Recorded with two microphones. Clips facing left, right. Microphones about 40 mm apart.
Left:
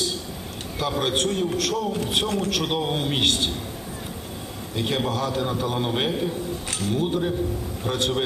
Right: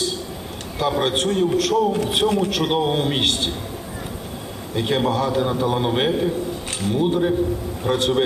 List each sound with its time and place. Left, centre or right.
0.8 s a man's voice: centre
4.7 s a man's voice: centre